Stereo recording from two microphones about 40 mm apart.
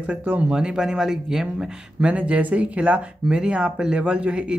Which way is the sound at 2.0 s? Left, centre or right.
Right.